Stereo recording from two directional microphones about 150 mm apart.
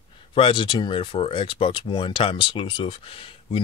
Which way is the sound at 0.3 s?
35° left (ahead or behind).